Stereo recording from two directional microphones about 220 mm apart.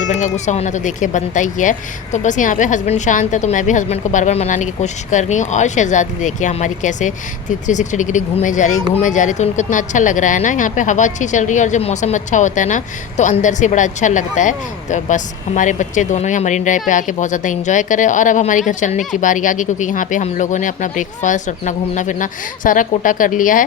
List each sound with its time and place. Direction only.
0.2 s speech: 30° left (ahead or behind)